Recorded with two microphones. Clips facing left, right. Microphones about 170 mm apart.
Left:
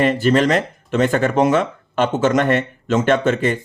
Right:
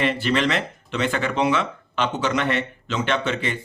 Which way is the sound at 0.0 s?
45° left (ahead or behind).